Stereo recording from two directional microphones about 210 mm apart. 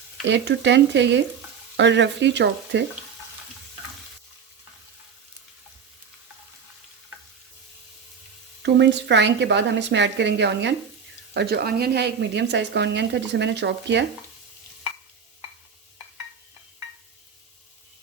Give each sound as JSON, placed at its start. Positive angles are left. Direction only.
{"t": 0.3, "sound": "speech", "side_deg": -60}
{"t": 8.6, "sound": "speech", "side_deg": -55}